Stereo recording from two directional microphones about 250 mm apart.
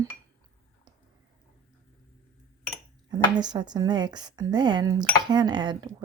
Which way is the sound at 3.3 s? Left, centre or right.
Centre.